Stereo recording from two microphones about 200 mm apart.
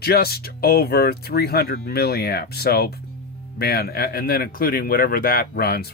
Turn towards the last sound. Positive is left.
turn(degrees=50)  # may be behind; listen again after turning